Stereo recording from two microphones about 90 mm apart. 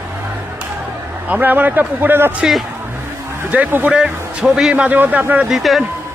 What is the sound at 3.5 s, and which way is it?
Speech, 15° right (ahead or behind).